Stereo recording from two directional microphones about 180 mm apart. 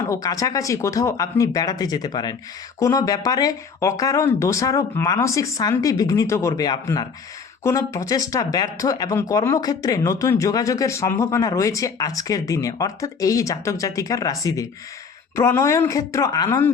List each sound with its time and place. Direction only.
0.0 s speech: 20° left (ahead or behind)